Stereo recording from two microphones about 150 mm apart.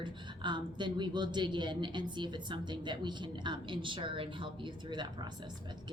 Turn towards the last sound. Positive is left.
turn(degrees=-30)  # may be behind; listen again after turning